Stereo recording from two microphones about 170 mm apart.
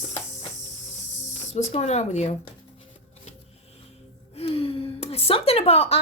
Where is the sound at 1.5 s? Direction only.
40° left (ahead or behind).